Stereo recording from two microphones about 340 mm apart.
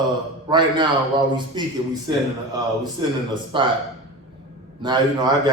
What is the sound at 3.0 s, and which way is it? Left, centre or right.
Speech, centre.